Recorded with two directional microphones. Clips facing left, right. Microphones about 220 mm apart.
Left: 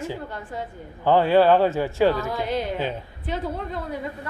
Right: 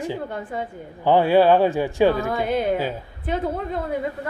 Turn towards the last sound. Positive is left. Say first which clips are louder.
# right 4 dB
turn(degrees=-55)  # may be behind; listen again after turning